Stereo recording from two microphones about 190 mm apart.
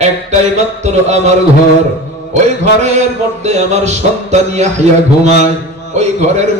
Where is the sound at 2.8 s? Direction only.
35° right (ahead or behind).